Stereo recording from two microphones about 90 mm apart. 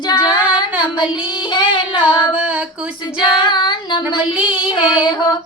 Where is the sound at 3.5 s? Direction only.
60° left (ahead or behind).